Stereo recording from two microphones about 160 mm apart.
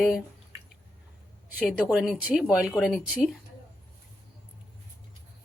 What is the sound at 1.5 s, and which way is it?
Speech, 5° right (ahead or behind).